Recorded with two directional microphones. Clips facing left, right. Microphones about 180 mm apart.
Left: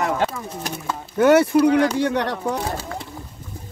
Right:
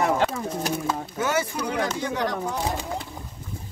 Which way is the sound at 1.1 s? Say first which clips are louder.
Left 14 dB; 60° left (ahead or behind).